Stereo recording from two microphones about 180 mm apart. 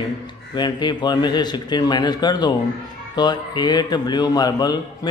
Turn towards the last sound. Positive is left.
turn(degrees=20)  # may be behind; listen again after turning